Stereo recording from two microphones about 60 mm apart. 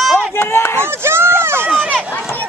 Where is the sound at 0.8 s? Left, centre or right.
Right.